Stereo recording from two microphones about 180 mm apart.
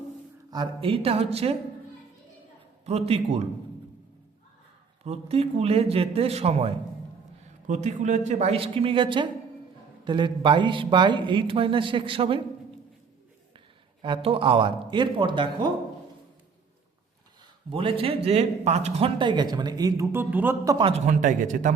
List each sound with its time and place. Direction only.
0.5 s a man's voice: 25° right (ahead or behind)
2.8 s a man's voice: 35° right (ahead or behind)
5.0 s a man's voice: 35° right (ahead or behind)
7.7 s a man's voice: 40° right (ahead or behind)
14.0 s speech: 30° right (ahead or behind)
17.7 s speech: 30° right (ahead or behind); by 20.7 s 10° right (ahead or behind)
20.7 s speech: 30° right (ahead or behind)
21.1 s speech: 45° right (ahead or behind)